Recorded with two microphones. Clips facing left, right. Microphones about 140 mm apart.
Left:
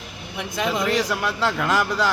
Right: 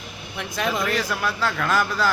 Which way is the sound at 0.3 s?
20° left (ahead or behind).